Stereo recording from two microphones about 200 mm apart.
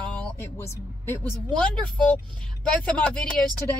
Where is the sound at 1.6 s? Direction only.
5° left (ahead or behind).